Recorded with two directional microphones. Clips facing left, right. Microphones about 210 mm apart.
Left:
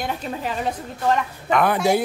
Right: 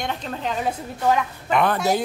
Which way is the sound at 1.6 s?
10° left (ahead or behind).